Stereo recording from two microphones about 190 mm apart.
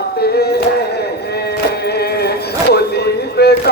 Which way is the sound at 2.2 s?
60° left (ahead or behind).